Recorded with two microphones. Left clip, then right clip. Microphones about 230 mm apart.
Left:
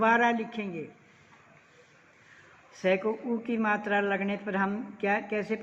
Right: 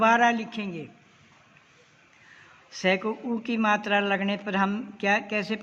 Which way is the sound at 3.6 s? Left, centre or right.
Right.